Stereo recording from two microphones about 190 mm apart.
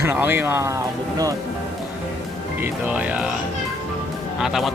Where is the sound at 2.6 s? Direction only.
5° right (ahead or behind).